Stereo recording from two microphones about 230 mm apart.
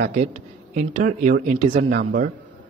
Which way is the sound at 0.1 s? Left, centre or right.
Right.